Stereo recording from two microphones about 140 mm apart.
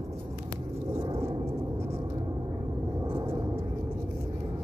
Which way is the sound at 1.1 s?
20° right (ahead or behind).